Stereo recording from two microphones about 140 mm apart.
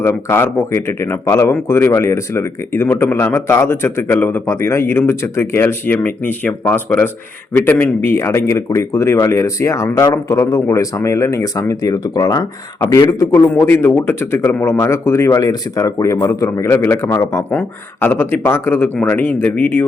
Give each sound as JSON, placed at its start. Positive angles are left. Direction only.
{"t": 0.0, "sound": "a man's voice", "side_deg": 15}